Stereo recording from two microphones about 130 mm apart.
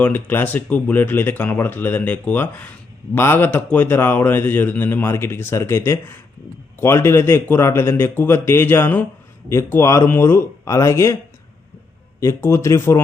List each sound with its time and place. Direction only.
0.0 s speech: 15° left (ahead or behind)
12.2 s speech: 20° left (ahead or behind)